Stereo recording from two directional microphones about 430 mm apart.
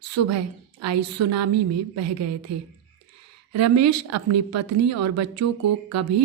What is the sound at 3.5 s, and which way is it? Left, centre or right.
A woman's voice, right.